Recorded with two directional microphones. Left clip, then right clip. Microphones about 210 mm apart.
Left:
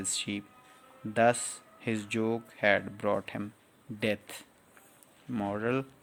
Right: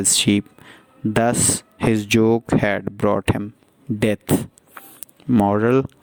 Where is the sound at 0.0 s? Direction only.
50° right (ahead or behind).